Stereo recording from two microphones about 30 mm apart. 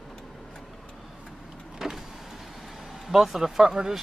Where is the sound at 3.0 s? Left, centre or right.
Centre.